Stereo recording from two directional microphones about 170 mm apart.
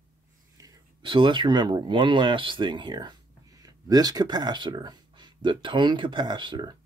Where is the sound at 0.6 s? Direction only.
30° right (ahead or behind).